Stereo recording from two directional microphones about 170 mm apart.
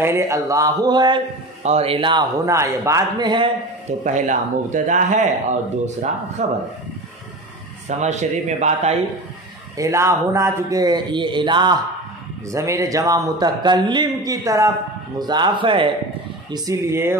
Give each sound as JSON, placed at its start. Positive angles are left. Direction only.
{"t": 0.0, "sound": "a man's voice", "side_deg": -15}
{"t": 1.6, "sound": "a man's voice", "side_deg": -40}
{"t": 4.0, "sound": "speech", "side_deg": -45}
{"t": 6.4, "sound": "speech", "side_deg": -40}
{"t": 7.9, "sound": "speech", "side_deg": -40}
{"t": 9.8, "sound": "a man's voice", "side_deg": -20}